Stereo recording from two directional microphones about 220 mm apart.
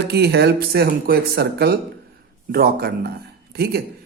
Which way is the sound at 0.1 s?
50° right (ahead or behind).